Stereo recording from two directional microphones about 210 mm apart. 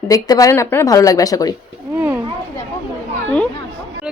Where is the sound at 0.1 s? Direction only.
15° left (ahead or behind).